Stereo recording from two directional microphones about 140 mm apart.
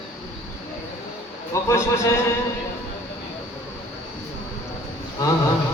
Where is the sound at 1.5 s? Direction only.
20° left (ahead or behind).